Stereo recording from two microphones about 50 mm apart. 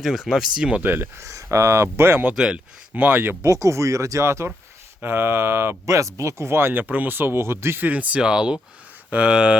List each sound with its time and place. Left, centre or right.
0.0 s speech: centre
0.8 s speech: right
1.2 s speech: right
2.3 s speech: centre
2.9 s speech: right
3.4 s speech: right
5.0 s speech: right
7.8 s speech: right